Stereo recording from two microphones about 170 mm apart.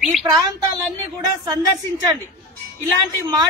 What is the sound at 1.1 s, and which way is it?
Speech, 25° right (ahead or behind).